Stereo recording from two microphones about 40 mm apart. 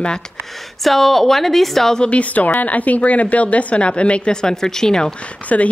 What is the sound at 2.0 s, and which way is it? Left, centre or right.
Speech, left.